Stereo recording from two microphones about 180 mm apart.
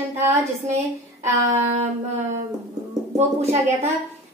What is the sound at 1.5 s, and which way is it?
Speech, 35° right (ahead or behind).